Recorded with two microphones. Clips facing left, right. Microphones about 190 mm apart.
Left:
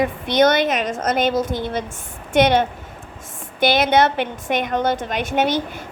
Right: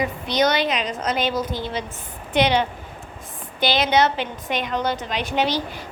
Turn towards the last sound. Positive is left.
turn(degrees=50)  # may be behind; listen again after turning